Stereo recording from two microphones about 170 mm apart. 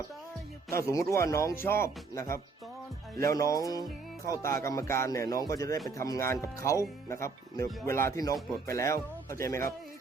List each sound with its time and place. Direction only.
0.8 s speech: 15° left (ahead or behind)